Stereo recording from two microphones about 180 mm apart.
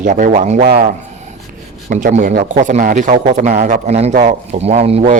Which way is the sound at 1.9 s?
45° right (ahead or behind).